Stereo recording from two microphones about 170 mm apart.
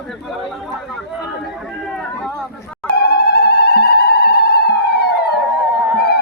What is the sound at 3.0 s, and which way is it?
Music, 70° left (ahead or behind).